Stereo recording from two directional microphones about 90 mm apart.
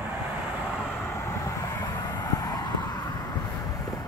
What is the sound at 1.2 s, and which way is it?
Vehicle, 35° left (ahead or behind).